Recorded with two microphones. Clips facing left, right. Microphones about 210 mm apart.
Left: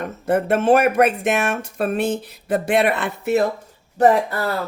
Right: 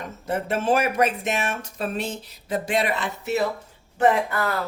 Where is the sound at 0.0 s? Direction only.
55° left (ahead or behind).